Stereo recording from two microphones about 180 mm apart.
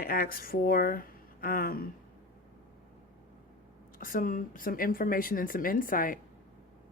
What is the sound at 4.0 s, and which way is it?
Speech, 50° left (ahead or behind).